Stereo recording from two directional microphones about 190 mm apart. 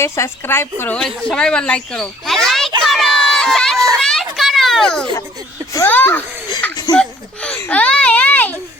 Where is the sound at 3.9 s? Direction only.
Centre (ahead or behind).